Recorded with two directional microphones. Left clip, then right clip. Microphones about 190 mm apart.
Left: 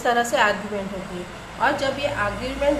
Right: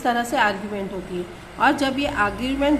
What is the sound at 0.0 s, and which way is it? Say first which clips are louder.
Speech: left 1 dB; 20° right (ahead or behind).